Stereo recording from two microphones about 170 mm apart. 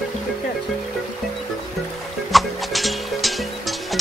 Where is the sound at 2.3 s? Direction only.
Centre (ahead or behind).